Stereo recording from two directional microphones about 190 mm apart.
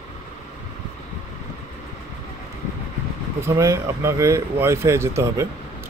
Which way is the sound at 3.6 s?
15° right (ahead or behind).